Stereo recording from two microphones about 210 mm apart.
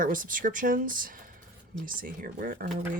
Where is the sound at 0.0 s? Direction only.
40° right (ahead or behind).